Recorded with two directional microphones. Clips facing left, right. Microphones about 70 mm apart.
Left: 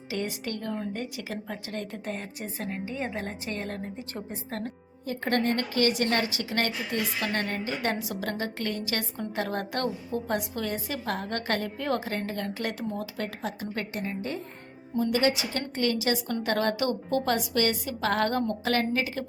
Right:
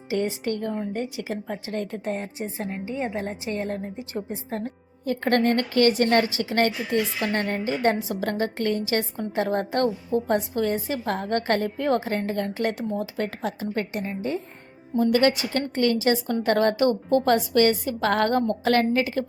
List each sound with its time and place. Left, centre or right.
0.3 s a woman's voice: right
1.7 s a woman's voice: right
2.4 s a woman's voice: right
5.0 s a woman's voice: right
14.9 s a woman's voice: right